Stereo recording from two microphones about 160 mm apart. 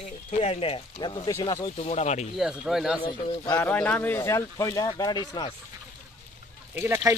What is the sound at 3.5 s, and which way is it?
Speech, 10° left (ahead or behind).